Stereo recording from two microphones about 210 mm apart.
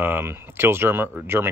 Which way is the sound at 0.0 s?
10° right (ahead or behind).